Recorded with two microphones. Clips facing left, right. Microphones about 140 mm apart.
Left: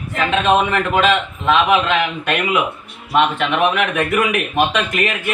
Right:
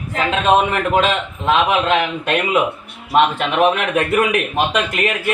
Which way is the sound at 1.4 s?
30° right (ahead or behind).